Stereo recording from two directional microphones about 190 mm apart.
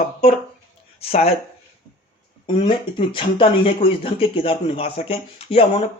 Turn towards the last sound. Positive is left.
turn(degrees=30)  # may be behind; listen again after turning